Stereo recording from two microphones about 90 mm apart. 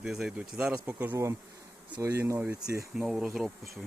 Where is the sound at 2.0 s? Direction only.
35° right (ahead or behind).